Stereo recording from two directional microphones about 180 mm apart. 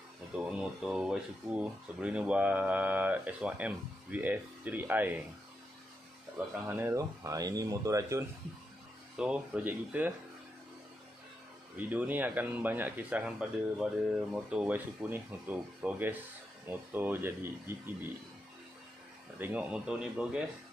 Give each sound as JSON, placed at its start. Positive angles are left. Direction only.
{"t": 0.5, "sound": "speech", "side_deg": -5}
{"t": 6.7, "sound": "speech", "side_deg": -15}
{"t": 9.1, "sound": "speech", "side_deg": -5}
{"t": 11.7, "sound": "speech", "side_deg": -10}
{"t": 19.3, "sound": "speech", "side_deg": -10}